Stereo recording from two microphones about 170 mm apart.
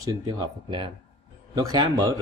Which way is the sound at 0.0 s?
25° right (ahead or behind).